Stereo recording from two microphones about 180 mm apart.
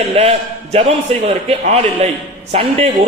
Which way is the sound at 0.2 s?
35° right (ahead or behind).